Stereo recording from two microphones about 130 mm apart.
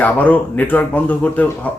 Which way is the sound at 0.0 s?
10° left (ahead or behind).